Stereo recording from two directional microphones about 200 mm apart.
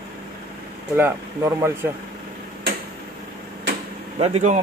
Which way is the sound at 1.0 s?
10° right (ahead or behind).